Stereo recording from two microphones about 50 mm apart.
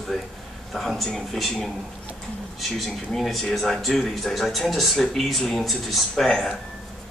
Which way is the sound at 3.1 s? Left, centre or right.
Centre.